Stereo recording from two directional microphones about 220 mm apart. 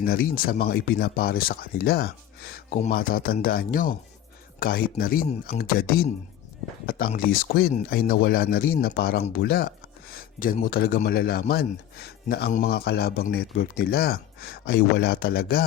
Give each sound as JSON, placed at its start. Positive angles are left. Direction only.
{"t": 0.0, "sound": "a man's voice", "side_deg": 40}